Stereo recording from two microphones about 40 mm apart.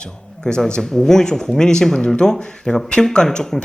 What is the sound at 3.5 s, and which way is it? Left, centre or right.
Speech, centre.